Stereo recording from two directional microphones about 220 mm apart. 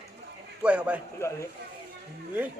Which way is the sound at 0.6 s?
5° right (ahead or behind).